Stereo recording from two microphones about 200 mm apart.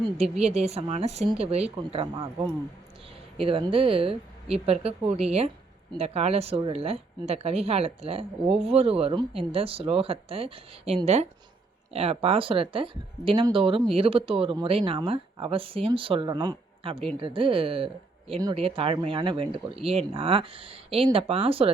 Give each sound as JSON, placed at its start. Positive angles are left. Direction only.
{"t": 0.2, "sound": "speech", "side_deg": -30}